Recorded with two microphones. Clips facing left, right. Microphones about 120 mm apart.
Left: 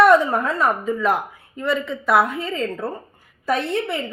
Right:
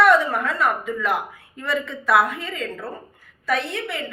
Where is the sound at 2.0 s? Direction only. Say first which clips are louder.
Left 1 dB; 25° left (ahead or behind).